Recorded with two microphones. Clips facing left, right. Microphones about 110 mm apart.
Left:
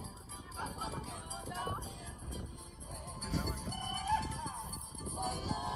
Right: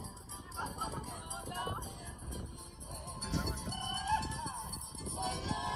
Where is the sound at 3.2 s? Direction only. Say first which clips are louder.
Even; 70° right (ahead or behind).